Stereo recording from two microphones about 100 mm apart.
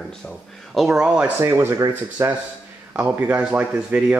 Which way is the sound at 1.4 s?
25° right (ahead or behind).